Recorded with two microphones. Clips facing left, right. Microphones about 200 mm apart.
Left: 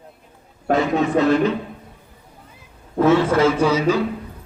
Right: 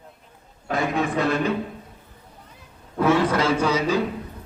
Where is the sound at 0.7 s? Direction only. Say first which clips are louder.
Left 7 dB; 55° left (ahead or behind).